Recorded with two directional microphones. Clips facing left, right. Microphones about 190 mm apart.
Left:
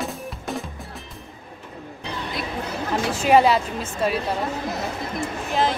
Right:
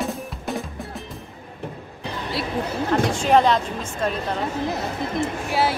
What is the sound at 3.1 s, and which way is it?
Speech, 5° left (ahead or behind).